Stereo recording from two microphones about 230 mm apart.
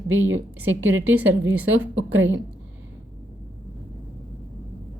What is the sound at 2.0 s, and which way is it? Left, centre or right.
Speech, right.